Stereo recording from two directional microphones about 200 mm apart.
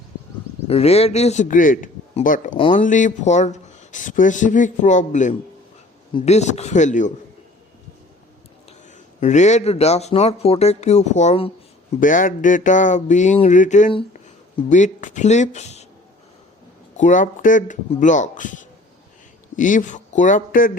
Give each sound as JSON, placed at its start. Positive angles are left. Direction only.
{"t": 0.7, "sound": "speech", "side_deg": 30}
{"t": 9.2, "sound": "speech", "side_deg": 35}
{"t": 11.9, "sound": "speech", "side_deg": 40}
{"t": 17.0, "sound": "speech", "side_deg": 40}